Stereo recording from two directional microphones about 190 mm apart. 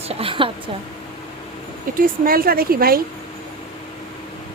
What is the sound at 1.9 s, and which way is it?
A woman's voice, 50° right (ahead or behind).